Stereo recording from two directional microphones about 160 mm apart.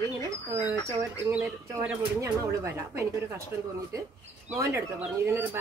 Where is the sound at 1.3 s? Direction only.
10° right (ahead or behind).